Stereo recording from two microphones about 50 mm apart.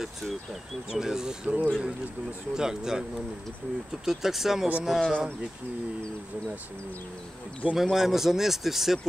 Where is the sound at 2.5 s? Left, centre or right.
Centre.